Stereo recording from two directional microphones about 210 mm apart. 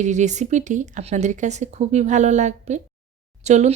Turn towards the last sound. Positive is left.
turn(degrees=-35)  # may be behind; listen again after turning